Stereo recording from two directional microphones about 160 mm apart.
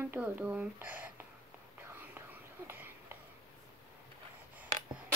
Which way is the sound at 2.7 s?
15° right (ahead or behind).